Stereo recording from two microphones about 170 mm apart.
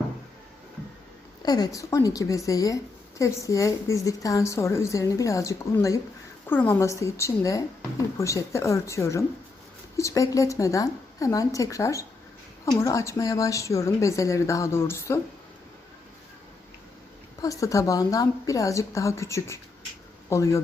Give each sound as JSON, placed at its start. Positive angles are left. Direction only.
{"t": 1.4, "sound": "a woman's voice", "side_deg": 25}
{"t": 17.4, "sound": "a woman's voice", "side_deg": 20}